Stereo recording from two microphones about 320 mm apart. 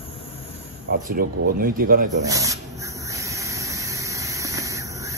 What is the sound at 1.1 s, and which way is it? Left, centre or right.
Speech, right.